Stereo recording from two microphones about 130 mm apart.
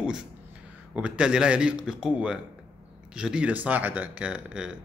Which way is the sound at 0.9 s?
10° right (ahead or behind).